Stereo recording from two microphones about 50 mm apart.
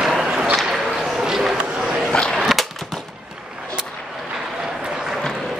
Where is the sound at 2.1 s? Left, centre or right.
Centre.